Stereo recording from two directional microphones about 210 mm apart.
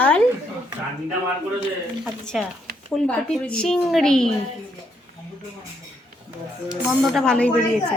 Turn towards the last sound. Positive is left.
turn(degrees=5)  # may be behind; listen again after turning